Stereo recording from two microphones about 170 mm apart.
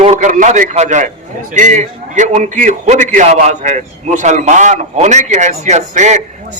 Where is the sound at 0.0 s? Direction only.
45° right (ahead or behind).